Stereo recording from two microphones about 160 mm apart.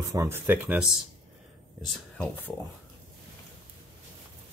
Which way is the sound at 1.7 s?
5° left (ahead or behind).